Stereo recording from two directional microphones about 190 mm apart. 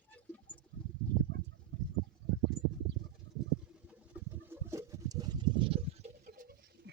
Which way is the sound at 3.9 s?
10° right (ahead or behind).